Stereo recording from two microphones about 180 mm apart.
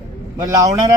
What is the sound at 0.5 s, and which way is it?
Speech, 20° right (ahead or behind).